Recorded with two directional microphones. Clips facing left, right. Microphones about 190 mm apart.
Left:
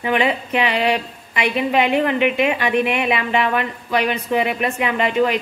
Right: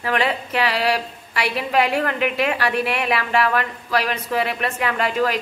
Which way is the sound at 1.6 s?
Centre (ahead or behind).